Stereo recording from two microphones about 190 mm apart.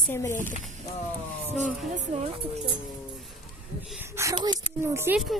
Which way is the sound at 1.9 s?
35° right (ahead or behind).